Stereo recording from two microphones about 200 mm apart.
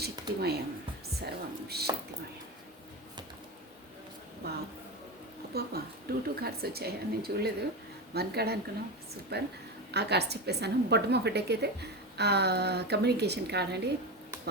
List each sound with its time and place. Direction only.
0.0 s a sound: 55° right (ahead or behind)
1.1 s speech: 55° right (ahead or behind)
5.5 s a woman's voice: 50° right (ahead or behind)